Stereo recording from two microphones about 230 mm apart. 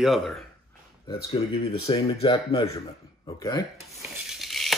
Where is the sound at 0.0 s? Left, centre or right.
Centre.